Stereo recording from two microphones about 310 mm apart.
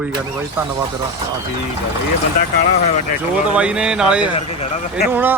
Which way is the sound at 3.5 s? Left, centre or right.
Centre.